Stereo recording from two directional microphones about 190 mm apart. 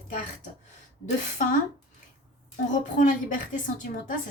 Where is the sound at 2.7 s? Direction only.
40° left (ahead or behind).